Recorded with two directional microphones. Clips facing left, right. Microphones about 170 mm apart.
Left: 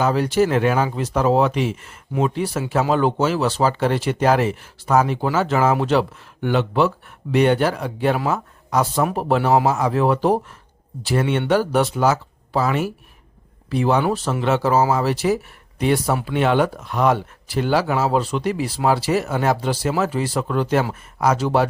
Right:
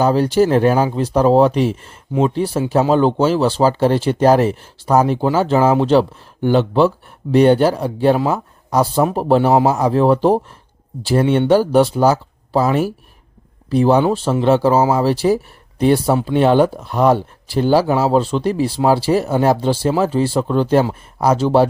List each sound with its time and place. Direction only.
0.0 s speech: 30° right (ahead or behind)